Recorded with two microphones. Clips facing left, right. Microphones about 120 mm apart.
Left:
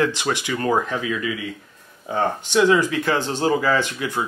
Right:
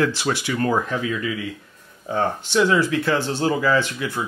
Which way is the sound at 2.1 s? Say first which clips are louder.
Even; 15° left (ahead or behind).